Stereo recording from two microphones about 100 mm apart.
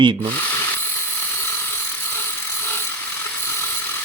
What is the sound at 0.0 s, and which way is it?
Speech, 55° right (ahead or behind).